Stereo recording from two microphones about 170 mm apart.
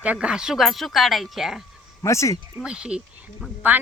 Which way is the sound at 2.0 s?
15° left (ahead or behind).